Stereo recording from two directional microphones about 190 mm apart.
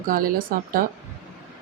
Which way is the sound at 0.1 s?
50° right (ahead or behind).